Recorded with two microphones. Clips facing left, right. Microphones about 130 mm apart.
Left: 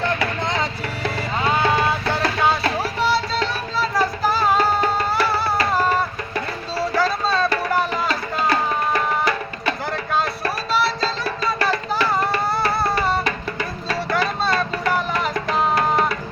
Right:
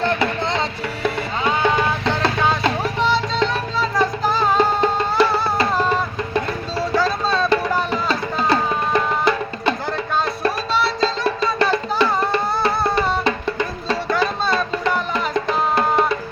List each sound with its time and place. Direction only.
0.0 s a sound: 30° right (ahead or behind)
1.6 s music: 20° right (ahead or behind)
2.8 s music: 5° left (ahead or behind)
4.8 s music: 25° right (ahead or behind)
5.7 s music: 5° left (ahead or behind)
7.9 s music: 25° right (ahead or behind)
10.7 s music: 5° left (ahead or behind)
11.0 s music: 25° right (ahead or behind)
13.2 s music: 25° right (ahead or behind)
15.3 s music: 25° right (ahead or behind)